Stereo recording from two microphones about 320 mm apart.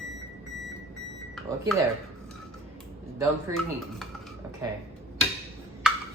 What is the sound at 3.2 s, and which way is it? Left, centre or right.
Speech, centre.